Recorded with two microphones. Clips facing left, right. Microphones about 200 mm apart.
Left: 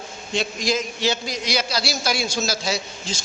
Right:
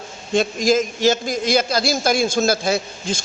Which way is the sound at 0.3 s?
45° right (ahead or behind).